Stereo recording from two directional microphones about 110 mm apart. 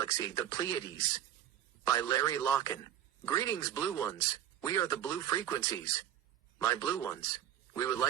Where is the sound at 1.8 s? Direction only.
30° left (ahead or behind).